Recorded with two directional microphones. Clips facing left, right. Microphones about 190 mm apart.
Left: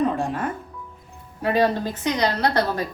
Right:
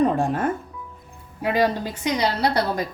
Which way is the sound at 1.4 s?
10° right (ahead or behind).